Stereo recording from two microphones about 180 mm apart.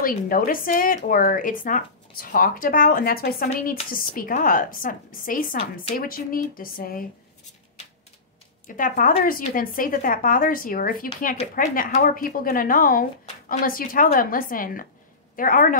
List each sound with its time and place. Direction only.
0.0 s speech: 50° left (ahead or behind)
8.6 s a woman's voice: 50° left (ahead or behind)